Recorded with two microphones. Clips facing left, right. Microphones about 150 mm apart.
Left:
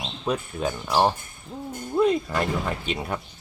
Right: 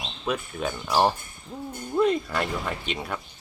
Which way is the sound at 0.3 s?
35° left (ahead or behind).